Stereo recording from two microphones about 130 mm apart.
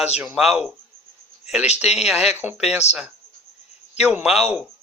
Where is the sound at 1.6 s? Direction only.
55° left (ahead or behind).